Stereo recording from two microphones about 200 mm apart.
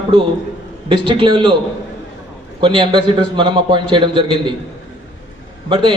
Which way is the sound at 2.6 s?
25° right (ahead or behind).